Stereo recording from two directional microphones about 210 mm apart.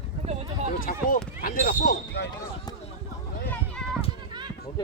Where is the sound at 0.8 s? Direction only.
40° left (ahead or behind).